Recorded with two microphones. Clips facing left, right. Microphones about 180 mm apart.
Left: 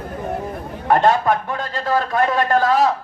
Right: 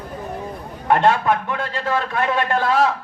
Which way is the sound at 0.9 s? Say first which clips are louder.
Left 1 dB; 40° left (ahead or behind).